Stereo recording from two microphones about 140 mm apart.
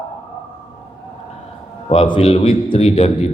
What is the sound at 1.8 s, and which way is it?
A man's voice, 40° left (ahead or behind).